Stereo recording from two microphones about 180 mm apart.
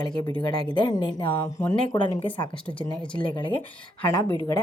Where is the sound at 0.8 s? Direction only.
30° left (ahead or behind).